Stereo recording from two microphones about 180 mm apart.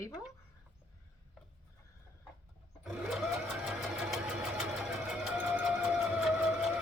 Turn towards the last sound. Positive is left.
turn(degrees=-5)  # may be behind; listen again after turning